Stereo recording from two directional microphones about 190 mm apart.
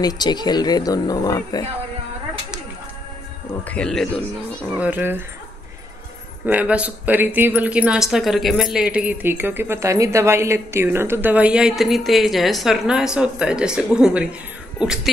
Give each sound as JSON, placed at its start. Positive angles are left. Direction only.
{"t": 0.0, "sound": "speech", "side_deg": 20}
{"t": 3.6, "sound": "speech", "side_deg": 5}
{"t": 4.6, "sound": "speech", "side_deg": -10}
{"t": 6.4, "sound": "speech", "side_deg": -10}